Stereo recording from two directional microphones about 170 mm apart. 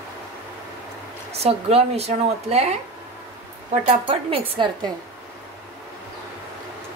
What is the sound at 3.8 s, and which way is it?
Speech, 35° right (ahead or behind).